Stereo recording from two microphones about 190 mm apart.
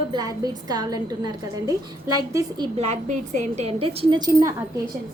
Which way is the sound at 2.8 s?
40° right (ahead or behind).